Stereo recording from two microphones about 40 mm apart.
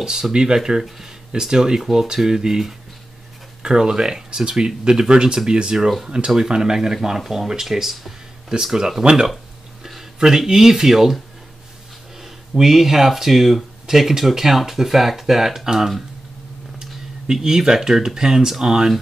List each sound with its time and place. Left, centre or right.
0.0 s speech: centre
8.7 s speech: centre
12.2 s speech: centre